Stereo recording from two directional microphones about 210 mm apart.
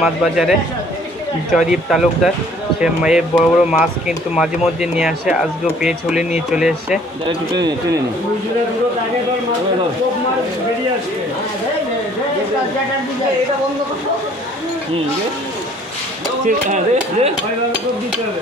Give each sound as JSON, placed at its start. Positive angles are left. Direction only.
{"t": 0.0, "sound": "speech", "side_deg": 0}
{"t": 4.9, "sound": "speech", "side_deg": -5}
{"t": 7.5, "sound": "a man's voice", "side_deg": -20}
{"t": 16.4, "sound": "speech", "side_deg": -35}